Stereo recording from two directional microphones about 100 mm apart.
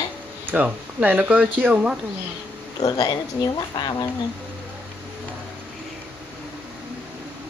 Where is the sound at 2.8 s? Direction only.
40° left (ahead or behind).